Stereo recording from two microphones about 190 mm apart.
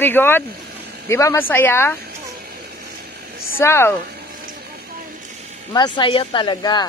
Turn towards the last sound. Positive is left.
turn(degrees=20)  # may be behind; listen again after turning